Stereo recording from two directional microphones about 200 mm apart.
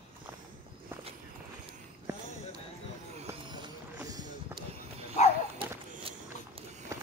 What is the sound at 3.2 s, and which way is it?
Run, 20° right (ahead or behind).